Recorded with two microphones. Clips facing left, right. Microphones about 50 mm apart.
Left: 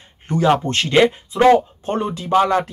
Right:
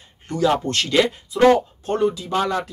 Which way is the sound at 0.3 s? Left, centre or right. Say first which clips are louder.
Left 3 dB; left.